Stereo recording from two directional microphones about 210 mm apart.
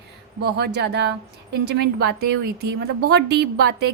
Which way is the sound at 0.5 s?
50° right (ahead or behind).